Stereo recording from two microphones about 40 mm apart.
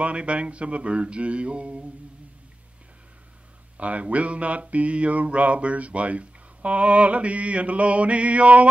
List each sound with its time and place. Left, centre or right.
0.0 s mantra: right
3.7 s mantra: right